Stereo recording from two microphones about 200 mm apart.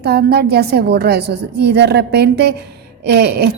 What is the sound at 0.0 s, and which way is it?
A woman's voice, 55° right (ahead or behind).